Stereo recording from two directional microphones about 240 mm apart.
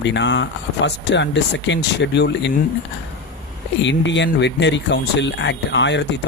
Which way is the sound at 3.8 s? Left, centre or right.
Left.